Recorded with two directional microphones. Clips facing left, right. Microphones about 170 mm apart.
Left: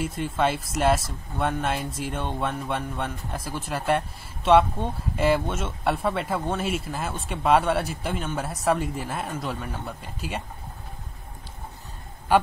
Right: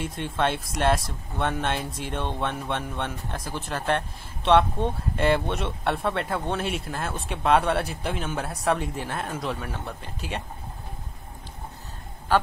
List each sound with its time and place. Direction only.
0.0 s speech: 5° left (ahead or behind)
12.3 s a man's voice: 10° left (ahead or behind)